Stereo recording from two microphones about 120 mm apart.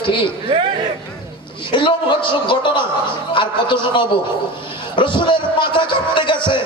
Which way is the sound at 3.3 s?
45° left (ahead or behind).